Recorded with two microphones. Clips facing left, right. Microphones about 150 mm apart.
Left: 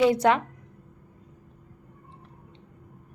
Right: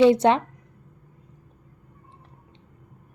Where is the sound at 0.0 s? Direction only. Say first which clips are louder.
Right 4 dB; 25° right (ahead or behind).